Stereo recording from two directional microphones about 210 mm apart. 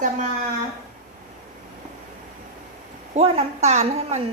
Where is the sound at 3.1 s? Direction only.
30° right (ahead or behind).